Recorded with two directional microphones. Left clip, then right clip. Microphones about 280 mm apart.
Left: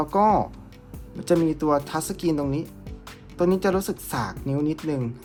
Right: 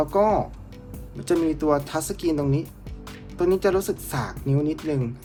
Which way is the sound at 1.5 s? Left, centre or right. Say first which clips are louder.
Even; centre.